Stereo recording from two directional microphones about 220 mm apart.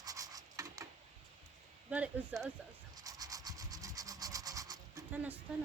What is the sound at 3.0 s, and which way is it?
Rub, 15° right (ahead or behind).